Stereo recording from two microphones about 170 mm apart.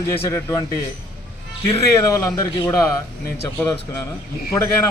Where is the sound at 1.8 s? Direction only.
20° left (ahead or behind).